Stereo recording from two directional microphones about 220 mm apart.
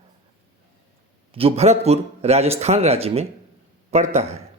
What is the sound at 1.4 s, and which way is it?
A man's voice, 25° right (ahead or behind).